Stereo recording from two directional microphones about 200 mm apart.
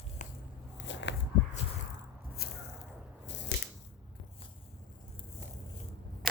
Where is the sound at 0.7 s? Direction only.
65° left (ahead or behind).